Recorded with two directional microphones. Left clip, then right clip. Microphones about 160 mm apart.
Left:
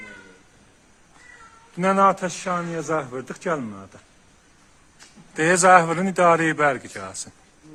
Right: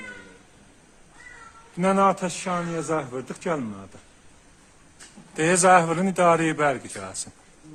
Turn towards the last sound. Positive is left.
turn(degrees=15)  # may be behind; listen again after turning